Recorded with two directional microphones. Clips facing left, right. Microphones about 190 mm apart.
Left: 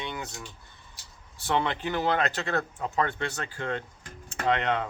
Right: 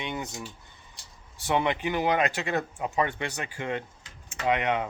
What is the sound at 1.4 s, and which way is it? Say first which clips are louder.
Speech: right 2 dB; 15° right (ahead or behind).